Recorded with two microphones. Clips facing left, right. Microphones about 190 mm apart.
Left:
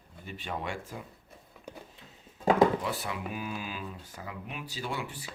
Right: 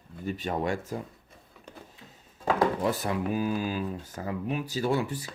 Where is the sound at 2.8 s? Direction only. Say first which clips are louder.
Right 7 dB; 45° right (ahead or behind).